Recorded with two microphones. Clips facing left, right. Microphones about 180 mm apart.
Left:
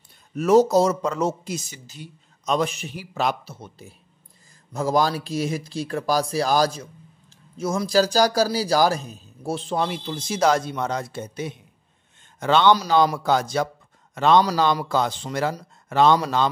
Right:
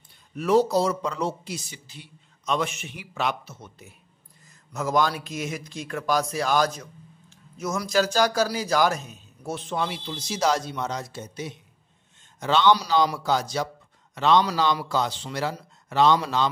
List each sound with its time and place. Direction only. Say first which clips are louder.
0.4 s speech: left 4 dB; 45° left (ahead or behind)